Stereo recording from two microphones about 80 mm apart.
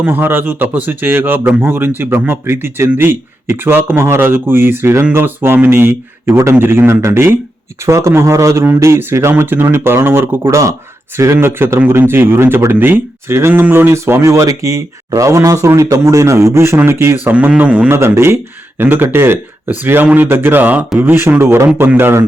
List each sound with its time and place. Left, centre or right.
0.0 s a man's voice: right
17.6 s a man's voice: centre
17.8 s a man's voice: right